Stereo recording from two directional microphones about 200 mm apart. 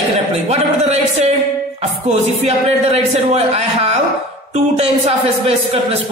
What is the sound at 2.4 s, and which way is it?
Speech, 30° right (ahead or behind).